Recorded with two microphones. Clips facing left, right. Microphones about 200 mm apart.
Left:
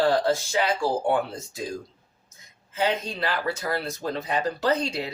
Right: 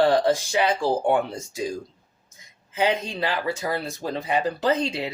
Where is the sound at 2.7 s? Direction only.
15° right (ahead or behind).